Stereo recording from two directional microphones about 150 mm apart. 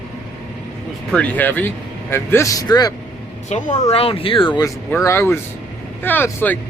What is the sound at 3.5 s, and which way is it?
Speech, 50° left (ahead or behind).